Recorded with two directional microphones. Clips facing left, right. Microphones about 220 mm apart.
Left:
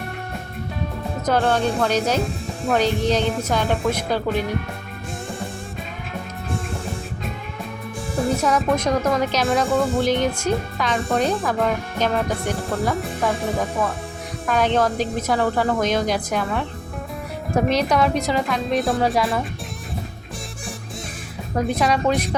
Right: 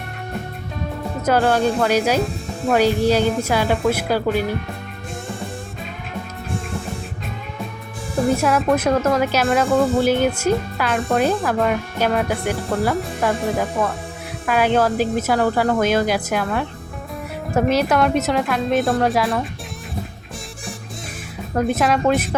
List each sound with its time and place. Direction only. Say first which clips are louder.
1.2 s speech: right 3 dB; 5° right (ahead or behind)
8.4 s speech: right 2 dB; 5° right (ahead or behind)
14.4 s speech: right 2 dB; 5° right (ahead or behind)
21.5 s speech: right 2 dB; centre (ahead or behind)